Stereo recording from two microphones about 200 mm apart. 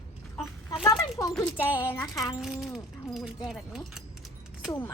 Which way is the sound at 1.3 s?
10° left (ahead or behind).